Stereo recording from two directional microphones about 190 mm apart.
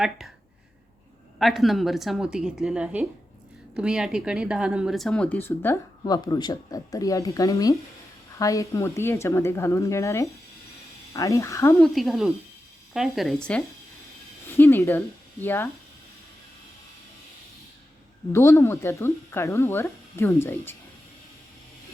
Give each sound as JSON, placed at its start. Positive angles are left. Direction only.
{"t": 1.4, "sound": "a woman's voice", "side_deg": 0}
{"t": 11.8, "sound": "a woman's voice", "side_deg": 0}
{"t": 18.3, "sound": "speech", "side_deg": 15}